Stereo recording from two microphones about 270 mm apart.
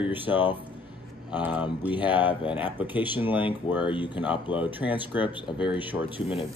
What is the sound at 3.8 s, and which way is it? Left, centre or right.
Speech, centre.